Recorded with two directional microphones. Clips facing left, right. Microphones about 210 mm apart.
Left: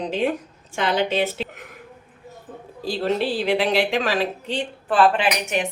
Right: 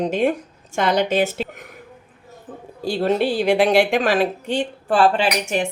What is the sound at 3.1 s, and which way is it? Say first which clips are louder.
A woman's voice: right 5 dB; 50° right (ahead or behind).